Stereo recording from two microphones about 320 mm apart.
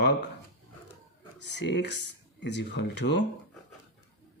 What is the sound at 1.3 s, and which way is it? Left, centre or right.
Speech, left.